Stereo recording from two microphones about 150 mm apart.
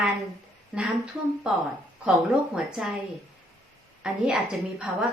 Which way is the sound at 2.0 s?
5° right (ahead or behind).